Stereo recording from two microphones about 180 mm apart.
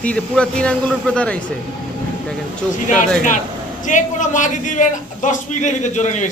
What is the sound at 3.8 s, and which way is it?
A man's voice, 45° left (ahead or behind).